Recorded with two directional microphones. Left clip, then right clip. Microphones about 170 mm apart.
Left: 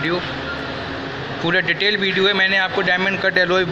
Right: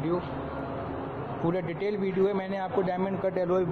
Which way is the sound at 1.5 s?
15° right (ahead or behind).